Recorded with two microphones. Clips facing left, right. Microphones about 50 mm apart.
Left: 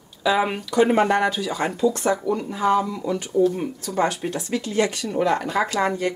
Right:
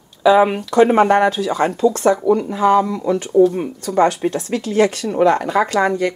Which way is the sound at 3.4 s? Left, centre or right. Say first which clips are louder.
Right 6 dB; right.